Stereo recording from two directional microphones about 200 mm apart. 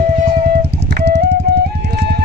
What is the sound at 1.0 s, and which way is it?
Music, 55° right (ahead or behind).